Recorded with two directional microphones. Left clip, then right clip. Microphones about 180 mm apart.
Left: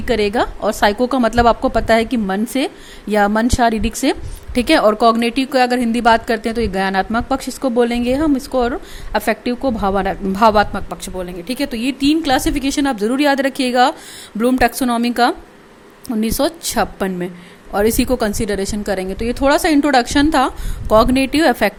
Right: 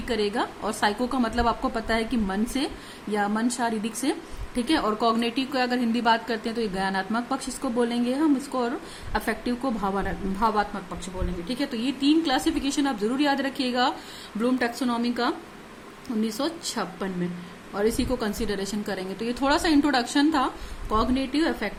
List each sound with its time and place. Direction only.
0.0 s a woman's voice: 40° left (ahead or behind)